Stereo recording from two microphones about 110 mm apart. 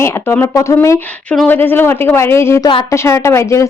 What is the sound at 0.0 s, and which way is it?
A woman's voice, 20° left (ahead or behind).